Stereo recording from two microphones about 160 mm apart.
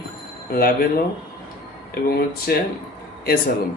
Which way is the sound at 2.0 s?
70° left (ahead or behind).